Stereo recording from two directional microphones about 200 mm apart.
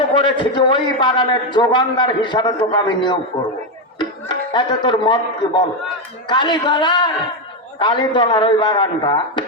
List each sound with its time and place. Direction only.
0.1 s a man's voice: 25° left (ahead or behind)
4.5 s a man's voice: 25° left (ahead or behind)